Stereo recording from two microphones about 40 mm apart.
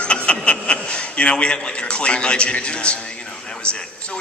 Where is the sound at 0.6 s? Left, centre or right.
Left.